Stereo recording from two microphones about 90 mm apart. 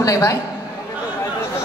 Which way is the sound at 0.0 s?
35° left (ahead or behind).